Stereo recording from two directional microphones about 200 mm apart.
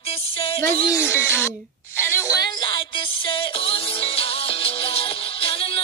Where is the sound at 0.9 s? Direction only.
10° left (ahead or behind).